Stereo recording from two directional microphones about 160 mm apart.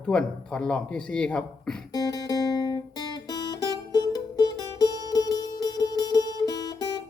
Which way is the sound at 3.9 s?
25° left (ahead or behind).